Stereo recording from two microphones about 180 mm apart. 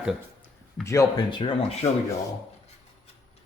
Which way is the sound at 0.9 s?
20° left (ahead or behind).